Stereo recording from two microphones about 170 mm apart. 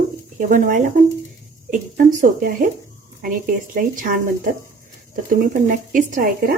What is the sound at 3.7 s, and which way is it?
Speech, 55° right (ahead or behind).